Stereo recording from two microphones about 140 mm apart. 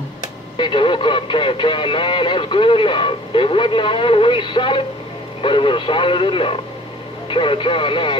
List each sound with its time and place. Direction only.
0.6 s speech: 35° left (ahead or behind)